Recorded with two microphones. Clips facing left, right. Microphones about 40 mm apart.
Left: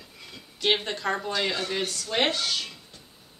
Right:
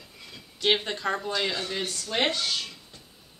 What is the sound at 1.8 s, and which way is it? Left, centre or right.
Speech, centre.